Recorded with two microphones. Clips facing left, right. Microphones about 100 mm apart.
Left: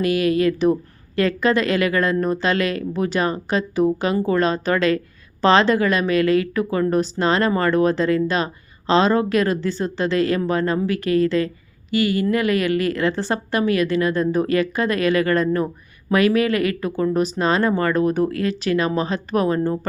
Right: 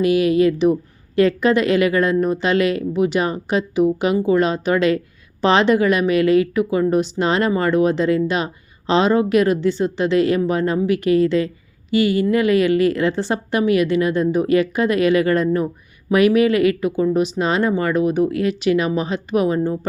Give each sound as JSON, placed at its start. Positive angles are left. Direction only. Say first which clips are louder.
{"t": 0.0, "sound": "a woman's voice", "louder": "right 3 dB", "side_deg": -25}